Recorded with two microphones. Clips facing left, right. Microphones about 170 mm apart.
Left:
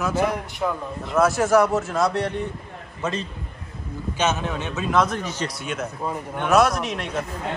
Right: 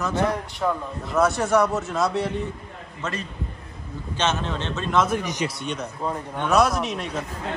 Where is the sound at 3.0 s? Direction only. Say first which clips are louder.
Left 4 dB; 20° left (ahead or behind).